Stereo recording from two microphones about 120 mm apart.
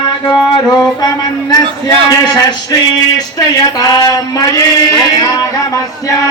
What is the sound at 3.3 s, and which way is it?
Speech, 30° left (ahead or behind).